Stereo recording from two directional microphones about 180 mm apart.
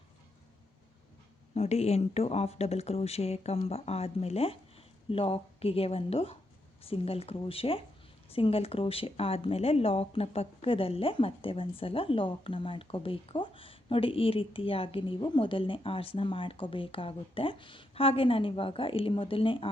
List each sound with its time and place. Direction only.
1.5 s speech: 35° left (ahead or behind)